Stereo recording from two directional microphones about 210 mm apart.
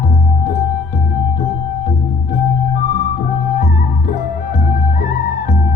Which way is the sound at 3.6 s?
40° left (ahead or behind).